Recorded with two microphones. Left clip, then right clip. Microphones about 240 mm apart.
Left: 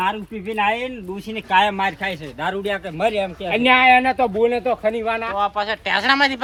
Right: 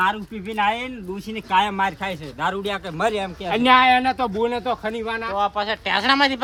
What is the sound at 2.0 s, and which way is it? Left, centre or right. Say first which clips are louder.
Speech: left 1 dB; right.